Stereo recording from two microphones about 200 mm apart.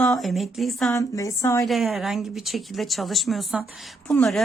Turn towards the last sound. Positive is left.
turn(degrees=0)  # may be behind; listen again after turning